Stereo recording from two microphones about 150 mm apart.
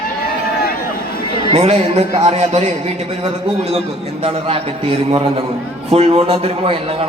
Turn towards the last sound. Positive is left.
turn(degrees=-40)  # may be behind; listen again after turning